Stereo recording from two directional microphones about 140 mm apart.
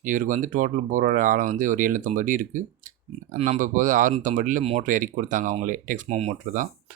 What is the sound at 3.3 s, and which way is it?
Speech, 45° right (ahead or behind).